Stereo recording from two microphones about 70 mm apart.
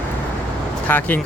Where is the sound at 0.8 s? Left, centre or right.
Left.